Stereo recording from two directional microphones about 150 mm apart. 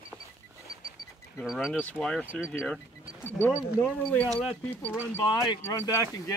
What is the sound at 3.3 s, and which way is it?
Speech, 15° left (ahead or behind).